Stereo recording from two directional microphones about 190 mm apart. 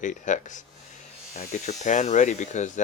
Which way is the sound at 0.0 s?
40° left (ahead or behind).